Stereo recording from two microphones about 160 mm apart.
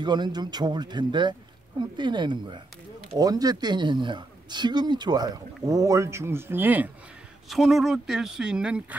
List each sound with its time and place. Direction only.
0.0 s speech: 30° right (ahead or behind); by 6.9 s 10° right (ahead or behind)
7.4 s speech: centre (ahead or behind)